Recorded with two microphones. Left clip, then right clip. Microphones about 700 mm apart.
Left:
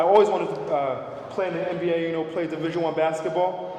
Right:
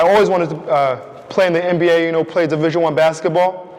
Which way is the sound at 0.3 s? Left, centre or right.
Right.